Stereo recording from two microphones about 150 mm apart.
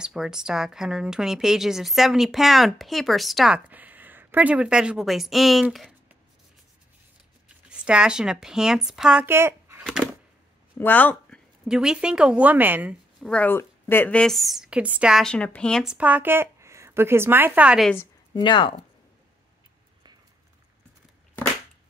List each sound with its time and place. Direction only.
0.0 s a woman's voice: 5° right (ahead or behind)
7.4 s speech: 5° right (ahead or behind)
10.8 s a sound: 10° left (ahead or behind)
11.6 s speech: 5° right (ahead or behind)
13.2 s a woman's voice: 10° left (ahead or behind)
15.8 s speech: 5° right (ahead or behind)
18.3 s speech: 30° left (ahead or behind)